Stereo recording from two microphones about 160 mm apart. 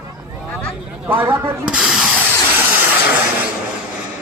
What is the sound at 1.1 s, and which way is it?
Speech, 15° right (ahead or behind).